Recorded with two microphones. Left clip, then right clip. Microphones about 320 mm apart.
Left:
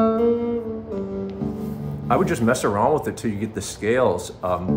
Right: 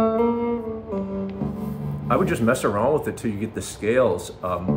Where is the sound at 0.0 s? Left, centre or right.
Right.